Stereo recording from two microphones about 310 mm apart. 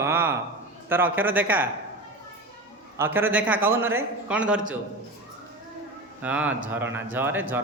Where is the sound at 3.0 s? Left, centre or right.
Centre.